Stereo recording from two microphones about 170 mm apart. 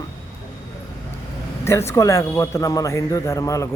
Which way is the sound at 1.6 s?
15° left (ahead or behind).